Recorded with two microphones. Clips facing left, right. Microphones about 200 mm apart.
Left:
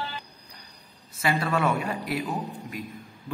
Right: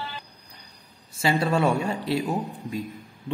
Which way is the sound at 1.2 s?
30° right (ahead or behind).